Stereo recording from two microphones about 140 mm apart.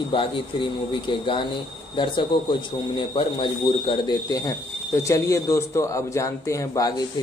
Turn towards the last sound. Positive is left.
turn(degrees=25)  # may be behind; listen again after turning